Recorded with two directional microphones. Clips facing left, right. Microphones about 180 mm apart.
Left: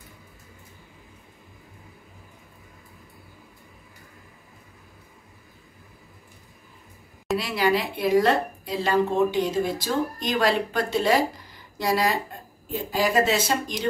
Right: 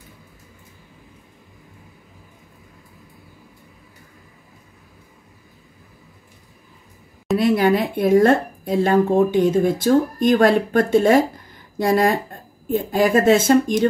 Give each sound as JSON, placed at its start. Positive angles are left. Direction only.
{"t": 7.3, "sound": "speech", "side_deg": -50}